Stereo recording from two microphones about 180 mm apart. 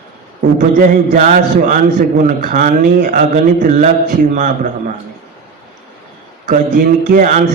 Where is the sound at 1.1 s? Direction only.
45° right (ahead or behind).